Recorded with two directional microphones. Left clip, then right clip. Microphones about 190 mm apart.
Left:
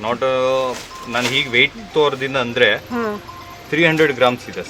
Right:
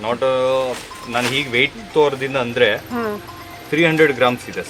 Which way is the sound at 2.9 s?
15° left (ahead or behind).